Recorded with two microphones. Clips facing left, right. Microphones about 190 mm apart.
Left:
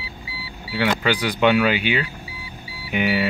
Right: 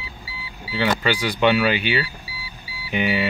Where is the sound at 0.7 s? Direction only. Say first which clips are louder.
Left 1 dB; 10° left (ahead or behind).